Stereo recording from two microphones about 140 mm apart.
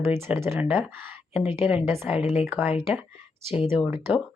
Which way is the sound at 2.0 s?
5° right (ahead or behind).